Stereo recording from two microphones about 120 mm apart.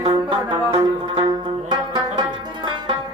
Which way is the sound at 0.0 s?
40° right (ahead or behind).